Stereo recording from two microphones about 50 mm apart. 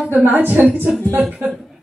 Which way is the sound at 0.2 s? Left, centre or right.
Right.